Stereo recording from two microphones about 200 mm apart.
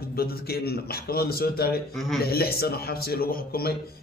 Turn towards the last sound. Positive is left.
turn(degrees=50)  # may be behind; listen again after turning